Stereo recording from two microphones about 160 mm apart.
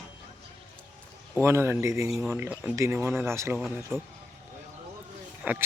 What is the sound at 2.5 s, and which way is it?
Speech, 10° right (ahead or behind).